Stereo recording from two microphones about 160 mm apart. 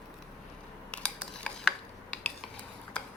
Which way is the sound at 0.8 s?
10° left (ahead or behind).